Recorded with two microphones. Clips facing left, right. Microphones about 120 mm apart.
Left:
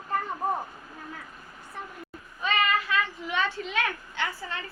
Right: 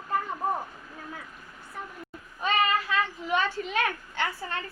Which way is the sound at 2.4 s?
40° right (ahead or behind).